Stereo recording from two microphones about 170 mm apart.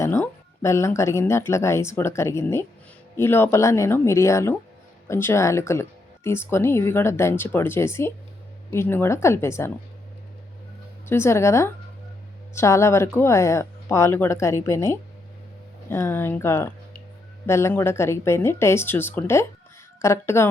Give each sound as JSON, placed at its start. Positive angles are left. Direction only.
{"t": 0.0, "sound": "speech", "side_deg": 15}
{"t": 11.1, "sound": "speech", "side_deg": 15}